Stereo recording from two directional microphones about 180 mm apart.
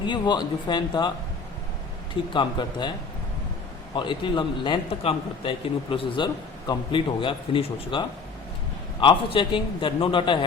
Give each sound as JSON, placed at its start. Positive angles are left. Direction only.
{"t": 0.0, "sound": "a man's voice", "side_deg": 25}
{"t": 2.3, "sound": "a man's voice", "side_deg": 25}
{"t": 3.9, "sound": "a man's voice", "side_deg": 25}